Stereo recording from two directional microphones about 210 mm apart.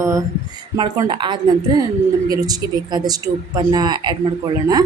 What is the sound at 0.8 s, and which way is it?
Speech, 20° right (ahead or behind).